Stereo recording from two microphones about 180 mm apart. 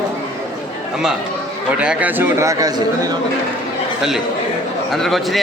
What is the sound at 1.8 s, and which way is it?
Speech, 10° right (ahead or behind).